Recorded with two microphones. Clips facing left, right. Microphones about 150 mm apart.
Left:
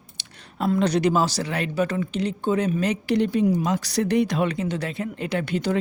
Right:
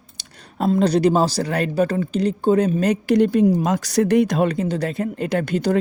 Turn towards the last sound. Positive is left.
turn(degrees=-45)  # may be behind; listen again after turning